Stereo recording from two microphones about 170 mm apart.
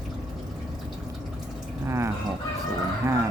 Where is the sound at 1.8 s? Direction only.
15° right (ahead or behind).